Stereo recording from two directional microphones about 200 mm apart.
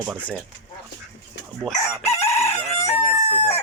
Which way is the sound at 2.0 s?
30° left (ahead or behind).